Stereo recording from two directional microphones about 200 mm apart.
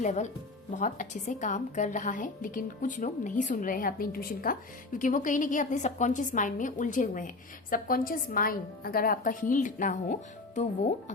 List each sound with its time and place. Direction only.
0.0 s a woman's voice: 35° left (ahead or behind)